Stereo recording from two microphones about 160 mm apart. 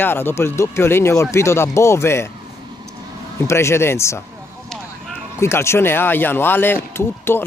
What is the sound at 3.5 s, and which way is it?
Speech, 15° left (ahead or behind).